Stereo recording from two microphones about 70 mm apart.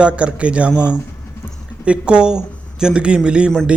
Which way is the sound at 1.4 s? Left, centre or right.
Left.